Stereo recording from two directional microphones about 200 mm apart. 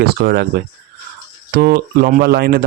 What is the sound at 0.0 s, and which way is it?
Speech, 50° right (ahead or behind).